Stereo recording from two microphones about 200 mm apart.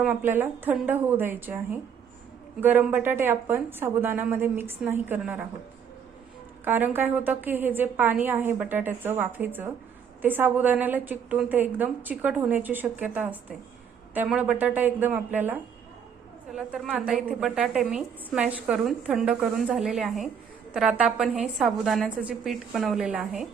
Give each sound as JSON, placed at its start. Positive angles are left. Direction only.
{"t": 0.0, "sound": "a woman's voice", "side_deg": -10}
{"t": 6.7, "sound": "a woman's voice", "side_deg": -10}